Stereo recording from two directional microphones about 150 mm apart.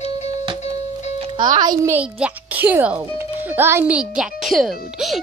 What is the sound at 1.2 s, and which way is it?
Speech, 30° right (ahead or behind).